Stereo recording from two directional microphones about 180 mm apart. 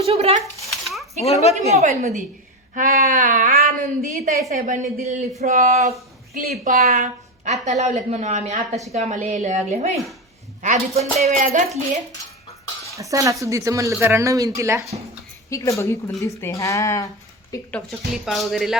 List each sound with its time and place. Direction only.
0.0 s a woman's voice: 35° right (ahead or behind)
1.2 s a woman's voice: 35° left (ahead or behind)
1.7 s a woman's voice: 40° right (ahead or behind)
13.0 s speech: 20° right (ahead or behind)
15.4 s speech: 15° left (ahead or behind)
17.5 s speech: 5° left (ahead or behind)